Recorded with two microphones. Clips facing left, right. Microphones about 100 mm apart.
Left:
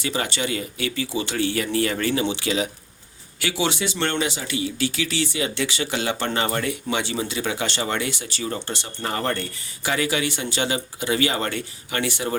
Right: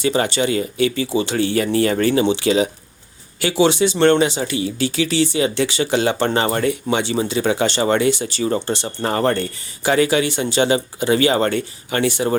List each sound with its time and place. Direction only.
0.0 s speech: 30° right (ahead or behind)
9.0 s speech: 40° right (ahead or behind)